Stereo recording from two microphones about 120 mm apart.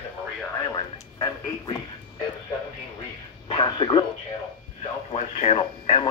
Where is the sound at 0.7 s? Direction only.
40° left (ahead or behind).